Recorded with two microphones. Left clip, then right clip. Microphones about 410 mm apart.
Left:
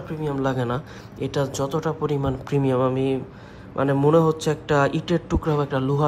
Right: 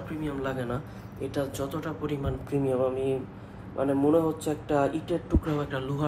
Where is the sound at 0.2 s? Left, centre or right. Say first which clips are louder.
Left 8 dB; centre.